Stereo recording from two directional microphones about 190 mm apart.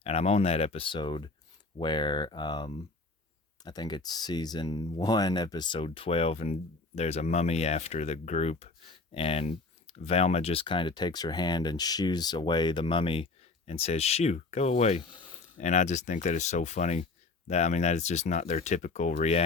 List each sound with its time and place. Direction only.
0.0 s speech: 35° left (ahead or behind)